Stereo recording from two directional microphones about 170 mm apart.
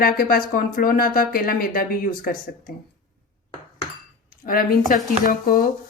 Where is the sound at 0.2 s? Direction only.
60° left (ahead or behind).